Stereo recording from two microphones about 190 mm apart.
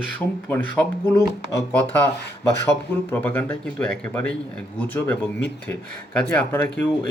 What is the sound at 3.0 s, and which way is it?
Speech, 10° left (ahead or behind).